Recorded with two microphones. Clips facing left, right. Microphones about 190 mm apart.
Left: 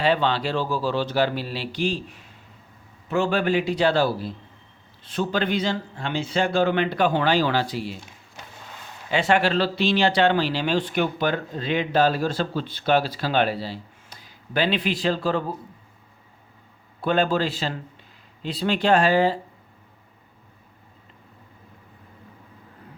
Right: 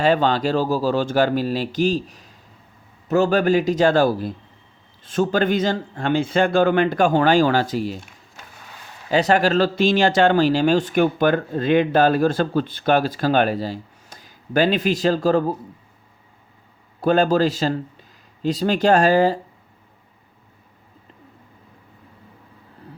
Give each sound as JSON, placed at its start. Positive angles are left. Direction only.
{"t": 0.0, "sound": "speech", "side_deg": -45}
{"t": 9.0, "sound": "speech", "side_deg": -40}
{"t": 17.0, "sound": "speech", "side_deg": -40}